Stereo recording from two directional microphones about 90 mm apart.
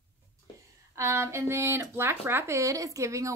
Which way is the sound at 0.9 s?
30° right (ahead or behind).